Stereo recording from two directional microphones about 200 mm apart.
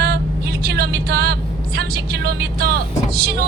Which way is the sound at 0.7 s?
50° right (ahead or behind).